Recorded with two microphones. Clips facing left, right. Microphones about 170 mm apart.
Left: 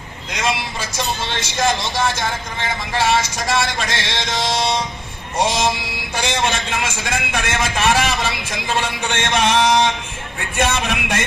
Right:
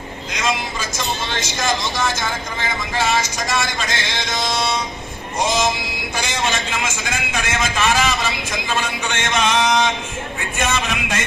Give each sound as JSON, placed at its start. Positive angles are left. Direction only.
{"t": 0.3, "sound": "vehicle", "side_deg": 60}
{"t": 1.6, "sound": "a man's voice", "side_deg": 60}
{"t": 6.2, "sound": "a man's voice", "side_deg": 60}
{"t": 10.6, "sound": "a sound", "side_deg": 60}